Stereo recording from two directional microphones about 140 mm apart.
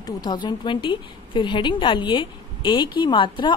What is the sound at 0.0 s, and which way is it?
A woman's voice, 30° left (ahead or behind).